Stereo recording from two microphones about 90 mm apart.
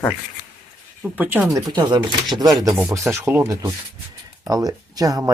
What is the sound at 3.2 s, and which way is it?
Speech, 20° right (ahead or behind).